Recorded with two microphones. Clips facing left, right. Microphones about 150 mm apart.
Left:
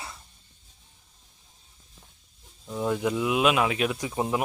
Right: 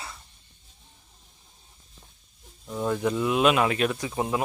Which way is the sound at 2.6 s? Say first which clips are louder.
Even; 5° left (ahead or behind).